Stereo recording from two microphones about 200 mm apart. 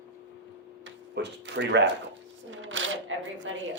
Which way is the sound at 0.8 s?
65° right (ahead or behind).